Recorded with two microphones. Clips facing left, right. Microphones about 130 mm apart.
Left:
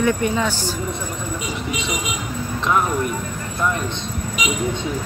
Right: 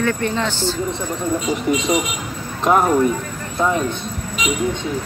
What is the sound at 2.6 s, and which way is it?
Speech, 45° right (ahead or behind).